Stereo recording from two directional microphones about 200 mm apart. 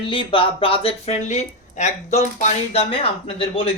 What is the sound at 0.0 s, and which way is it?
Speech, 25° left (ahead or behind).